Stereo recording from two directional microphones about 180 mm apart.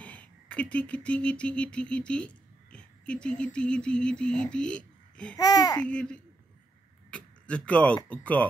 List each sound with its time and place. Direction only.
0.0 s a child's voice: 10° left (ahead or behind)
5.4 s speech: 20° left (ahead or behind)
5.8 s speech: 5° left (ahead or behind)